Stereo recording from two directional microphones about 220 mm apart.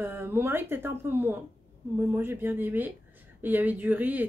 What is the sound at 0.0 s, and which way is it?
Speech, 10° right (ahead or behind).